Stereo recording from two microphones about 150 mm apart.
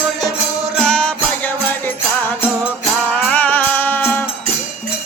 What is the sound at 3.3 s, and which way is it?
Music, 10° left (ahead or behind).